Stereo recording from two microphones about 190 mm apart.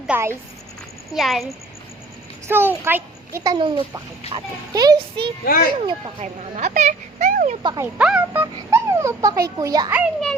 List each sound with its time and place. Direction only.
0.1 s a child's voice: 15° right (ahead or behind)
1.1 s a child's voice: centre (ahead or behind)
2.5 s a child's voice: 10° right (ahead or behind)
6.6 s speech: 40° right (ahead or behind)
7.6 s a child's voice: 20° right (ahead or behind)
7.9 s a child's voice: 5° right (ahead or behind)
9.9 s a child's voice: centre (ahead or behind)